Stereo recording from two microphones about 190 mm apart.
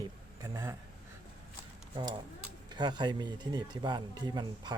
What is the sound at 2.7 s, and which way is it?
Speech, 25° right (ahead or behind).